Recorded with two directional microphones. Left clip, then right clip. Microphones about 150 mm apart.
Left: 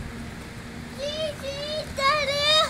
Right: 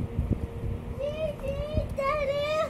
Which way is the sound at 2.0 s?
5° left (ahead or behind).